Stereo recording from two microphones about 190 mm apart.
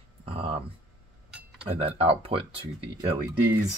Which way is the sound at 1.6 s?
30° right (ahead or behind).